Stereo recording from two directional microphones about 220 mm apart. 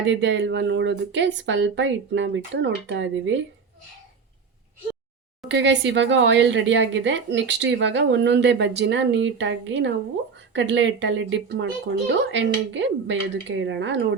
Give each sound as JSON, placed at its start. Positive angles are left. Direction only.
{"t": 0.0, "sound": "a woman's voice", "side_deg": -55}
{"t": 5.5, "sound": "a woman's voice", "side_deg": -55}